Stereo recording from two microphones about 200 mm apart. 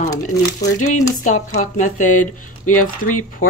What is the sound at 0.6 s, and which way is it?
Speech, 35° left (ahead or behind).